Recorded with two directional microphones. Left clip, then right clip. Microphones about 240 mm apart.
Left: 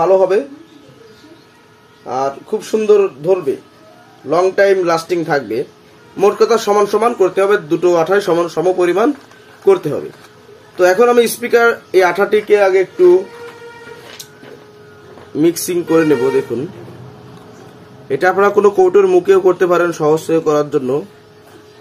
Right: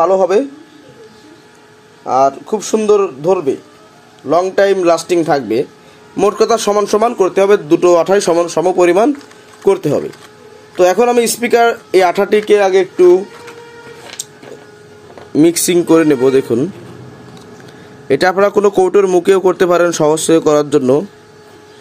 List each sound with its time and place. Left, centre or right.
0.0 s speech: right
2.0 s speech: right
14.2 s music: right
15.3 s speech: right
18.0 s speech: right